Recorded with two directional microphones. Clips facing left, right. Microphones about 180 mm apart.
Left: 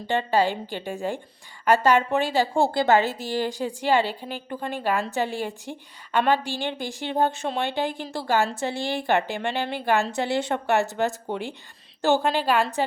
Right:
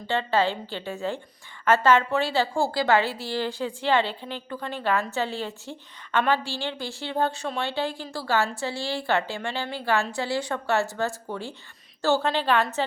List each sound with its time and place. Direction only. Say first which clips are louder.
0.1 s a woman's voice: left 2 dB; 15° left (ahead or behind)
2.9 s a woman's voice: even; 45° left (ahead or behind)
3.2 s a woman's voice: left 2 dB; 15° left (ahead or behind)